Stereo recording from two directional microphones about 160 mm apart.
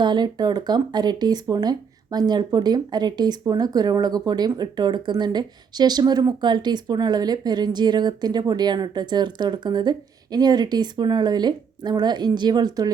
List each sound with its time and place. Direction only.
0.0 s speech: 25° right (ahead or behind)